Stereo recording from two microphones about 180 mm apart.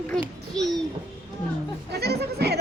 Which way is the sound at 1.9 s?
65° right (ahead or behind).